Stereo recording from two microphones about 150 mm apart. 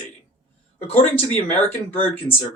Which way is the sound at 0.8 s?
40° left (ahead or behind).